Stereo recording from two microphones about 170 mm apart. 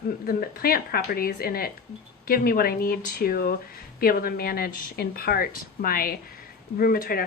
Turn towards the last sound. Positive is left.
turn(degrees=60)  # may be behind; listen again after turning